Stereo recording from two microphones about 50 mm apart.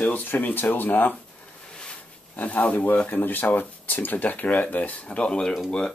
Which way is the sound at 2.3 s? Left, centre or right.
Left.